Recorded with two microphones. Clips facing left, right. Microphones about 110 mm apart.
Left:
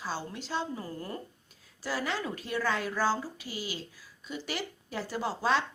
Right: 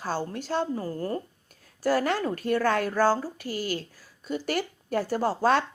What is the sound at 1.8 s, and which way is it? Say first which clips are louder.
Speech: right 9 dB; 50° right (ahead or behind).